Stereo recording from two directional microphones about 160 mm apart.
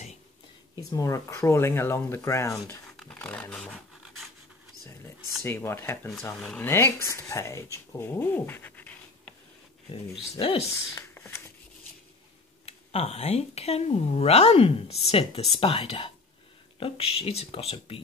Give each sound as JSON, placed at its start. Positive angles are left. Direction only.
{"t": 0.7, "sound": "speech", "side_deg": 20}
{"t": 3.0, "sound": "dog", "side_deg": 5}
{"t": 5.4, "sound": "speech", "side_deg": 15}
{"t": 6.7, "sound": "speech", "side_deg": 15}
{"t": 10.4, "sound": "speech", "side_deg": 35}
{"t": 11.0, "sound": "shuffling cards", "side_deg": 15}
{"t": 12.6, "sound": "speech", "side_deg": 40}